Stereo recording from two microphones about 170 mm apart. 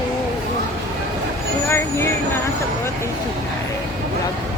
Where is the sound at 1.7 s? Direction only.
15° left (ahead or behind).